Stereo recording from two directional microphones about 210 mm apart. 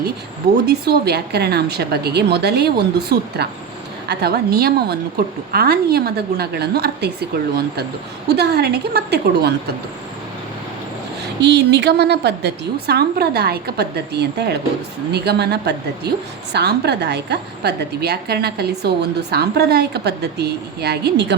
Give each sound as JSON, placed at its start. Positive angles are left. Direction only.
{"t": 0.7, "sound": "a woman's voice", "side_deg": -50}
{"t": 11.3, "sound": "a woman's voice", "side_deg": -55}